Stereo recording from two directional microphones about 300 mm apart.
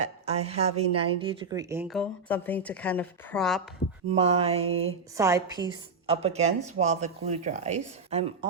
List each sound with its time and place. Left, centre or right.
0.3 s speech: right; by 3.6 s centre
4.1 s a woman's voice: centre